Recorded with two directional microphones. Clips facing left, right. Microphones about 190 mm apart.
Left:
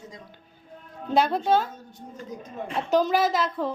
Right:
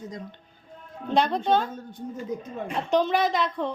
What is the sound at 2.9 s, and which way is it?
Speech, centre (ahead or behind).